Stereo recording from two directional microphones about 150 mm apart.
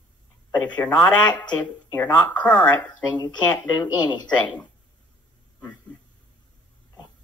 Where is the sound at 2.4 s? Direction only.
10° left (ahead or behind).